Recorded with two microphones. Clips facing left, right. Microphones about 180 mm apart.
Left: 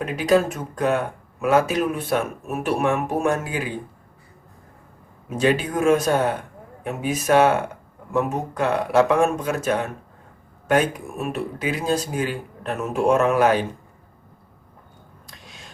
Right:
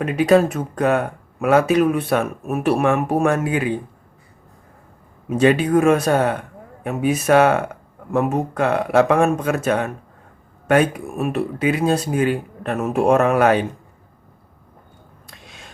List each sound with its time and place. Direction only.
0.0 s speech: 60° right (ahead or behind)
5.4 s speech: 60° right (ahead or behind)